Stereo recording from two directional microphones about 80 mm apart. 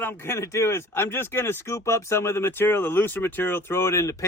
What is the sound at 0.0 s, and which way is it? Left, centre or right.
A man's voice, left.